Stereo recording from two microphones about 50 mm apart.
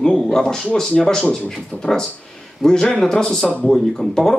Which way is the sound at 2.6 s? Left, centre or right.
Centre.